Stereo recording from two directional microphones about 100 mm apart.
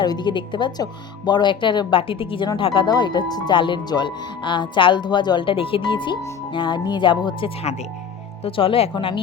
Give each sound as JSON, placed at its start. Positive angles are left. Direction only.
{"t": 0.0, "sound": "speech", "side_deg": 45}
{"t": 8.4, "sound": "speech", "side_deg": 65}